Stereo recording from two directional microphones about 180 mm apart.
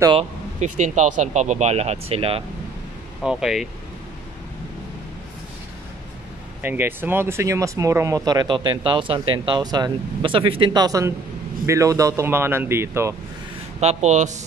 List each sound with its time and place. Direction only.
0.0 s speech: 25° right (ahead or behind)
0.6 s speech: 40° right (ahead or behind)
3.2 s speech: 5° right (ahead or behind)
6.6 s speech: 10° right (ahead or behind)
13.7 s speech: 40° right (ahead or behind)